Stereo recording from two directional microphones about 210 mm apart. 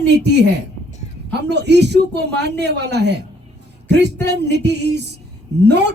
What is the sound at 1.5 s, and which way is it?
A man's voice, 55° right (ahead or behind).